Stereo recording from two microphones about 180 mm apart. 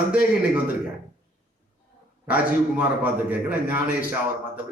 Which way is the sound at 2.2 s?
10° right (ahead or behind).